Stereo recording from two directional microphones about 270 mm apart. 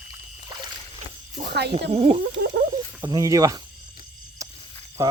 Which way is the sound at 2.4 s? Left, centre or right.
Right.